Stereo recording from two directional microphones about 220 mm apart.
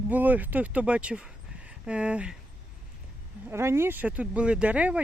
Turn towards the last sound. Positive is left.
turn(degrees=-5)  # may be behind; listen again after turning